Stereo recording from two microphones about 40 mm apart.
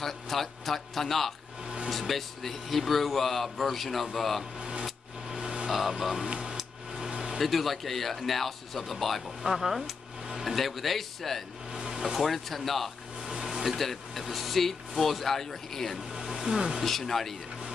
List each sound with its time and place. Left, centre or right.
0.0 s speech: centre
4.6 s speech: right
5.3 s vehicle: right
5.9 s speech: centre
6.2 s speech: right
7.0 s a sound: right
7.3 s speech: centre
11.7 s air conditioning: centre
12.2 s speech: centre
13.3 s a sound: centre
13.7 s speech: centre
16.1 s music: centre
16.8 s speech: centre